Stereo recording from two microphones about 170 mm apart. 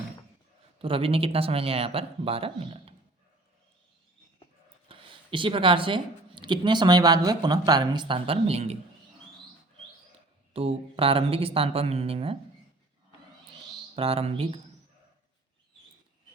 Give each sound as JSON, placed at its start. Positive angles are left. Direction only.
{"t": 0.8, "sound": "speech", "side_deg": -35}
{"t": 4.9, "sound": "speech", "side_deg": -30}
{"t": 10.5, "sound": "speech", "side_deg": -35}
{"t": 13.9, "sound": "speech", "side_deg": -35}